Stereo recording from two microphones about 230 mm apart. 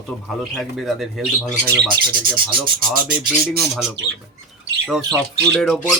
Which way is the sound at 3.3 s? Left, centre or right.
Centre.